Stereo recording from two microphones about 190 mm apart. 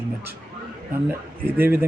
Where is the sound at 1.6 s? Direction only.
10° right (ahead or behind).